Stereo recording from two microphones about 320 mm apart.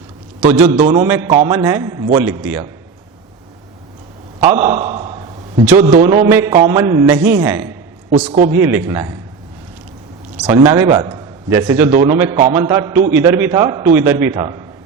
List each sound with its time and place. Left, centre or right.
0.7 s a man's voice: centre
4.5 s a sound: centre
5.8 s a man's voice: centre
6.2 s a man's voice: centre
10.3 s a man's voice: centre
11.9 s a man's voice: right
12.1 s a man's voice: centre